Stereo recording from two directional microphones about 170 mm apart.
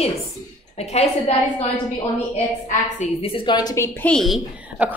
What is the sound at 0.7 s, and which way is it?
Speech, 40° left (ahead or behind).